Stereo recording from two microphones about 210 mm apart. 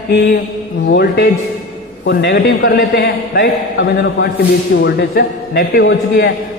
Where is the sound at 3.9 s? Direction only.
55° left (ahead or behind).